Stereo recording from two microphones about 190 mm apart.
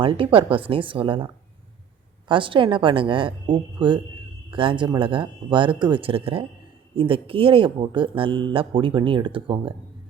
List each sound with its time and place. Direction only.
0.0 s speech: 30° right (ahead or behind)